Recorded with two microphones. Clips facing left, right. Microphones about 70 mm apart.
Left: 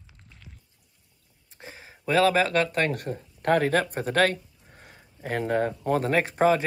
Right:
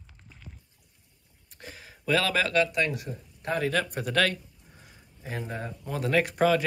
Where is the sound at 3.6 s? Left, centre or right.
Left.